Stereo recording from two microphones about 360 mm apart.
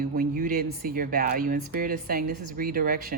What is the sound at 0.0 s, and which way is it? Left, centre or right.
Speech, right.